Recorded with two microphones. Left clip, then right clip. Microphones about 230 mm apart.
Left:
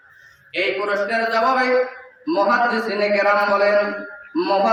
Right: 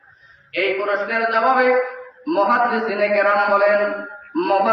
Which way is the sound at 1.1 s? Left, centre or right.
Left.